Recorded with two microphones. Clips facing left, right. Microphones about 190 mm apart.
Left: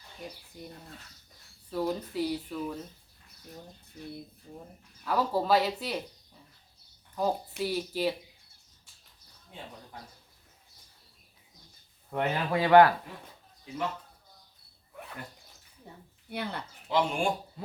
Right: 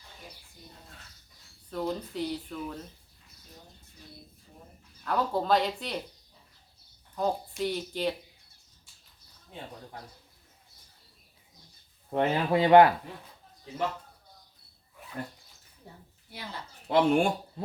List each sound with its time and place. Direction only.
1.7 s speech: 5° left (ahead or behind)
5.0 s speech: 5° left (ahead or behind)
7.2 s speech: 5° left (ahead or behind)
12.1 s speech: 25° right (ahead or behind)
16.3 s speech: 60° left (ahead or behind)
16.9 s speech: 55° right (ahead or behind)